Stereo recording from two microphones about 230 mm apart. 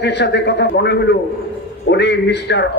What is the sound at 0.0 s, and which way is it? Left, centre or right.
A man's voice, left.